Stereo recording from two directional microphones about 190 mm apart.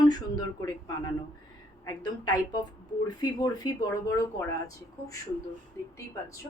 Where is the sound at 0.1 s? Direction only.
20° left (ahead or behind).